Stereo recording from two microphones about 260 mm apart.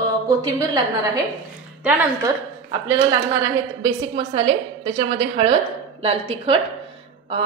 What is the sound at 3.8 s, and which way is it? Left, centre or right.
A woman's voice, centre.